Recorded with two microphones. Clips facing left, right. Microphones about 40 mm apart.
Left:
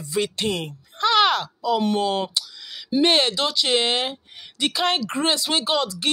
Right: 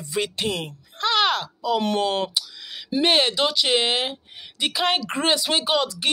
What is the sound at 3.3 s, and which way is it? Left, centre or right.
Speech, right.